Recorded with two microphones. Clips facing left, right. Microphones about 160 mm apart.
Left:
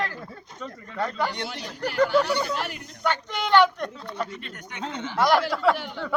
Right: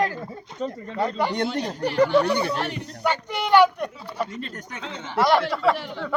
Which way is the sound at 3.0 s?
10° right (ahead or behind).